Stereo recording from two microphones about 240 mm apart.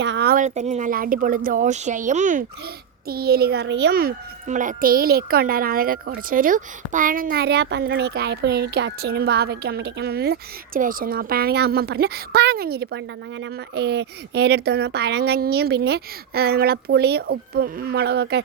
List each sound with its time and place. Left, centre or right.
0.0 s speech: right